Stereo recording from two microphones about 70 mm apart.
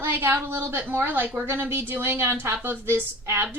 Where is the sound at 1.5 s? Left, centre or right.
Right.